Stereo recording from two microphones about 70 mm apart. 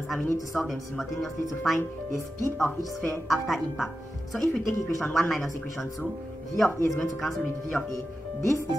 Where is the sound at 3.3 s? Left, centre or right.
Centre.